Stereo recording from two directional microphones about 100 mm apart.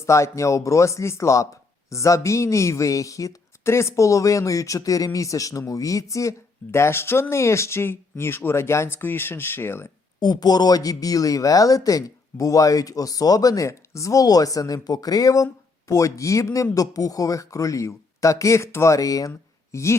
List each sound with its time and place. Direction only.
0.0 s a woman's voice: 30° left (ahead or behind)
10.2 s a woman's voice: 45° left (ahead or behind)